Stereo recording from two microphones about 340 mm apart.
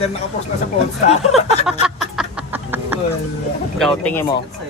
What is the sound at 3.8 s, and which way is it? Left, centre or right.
Speech, centre.